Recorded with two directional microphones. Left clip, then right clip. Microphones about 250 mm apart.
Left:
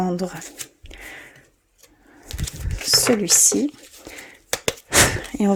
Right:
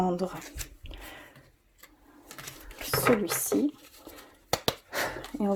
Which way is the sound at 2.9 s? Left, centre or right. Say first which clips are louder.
Left 8 dB; left.